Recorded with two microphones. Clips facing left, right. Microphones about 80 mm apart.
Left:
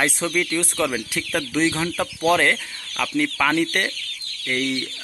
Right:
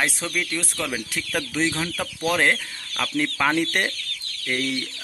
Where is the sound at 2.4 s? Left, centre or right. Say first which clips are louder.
Left 1 dB; centre.